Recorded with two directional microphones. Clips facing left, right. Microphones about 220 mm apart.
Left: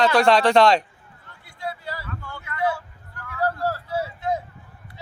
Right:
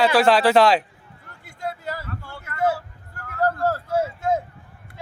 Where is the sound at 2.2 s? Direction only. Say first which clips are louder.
Left 1 dB; 35° right (ahead or behind).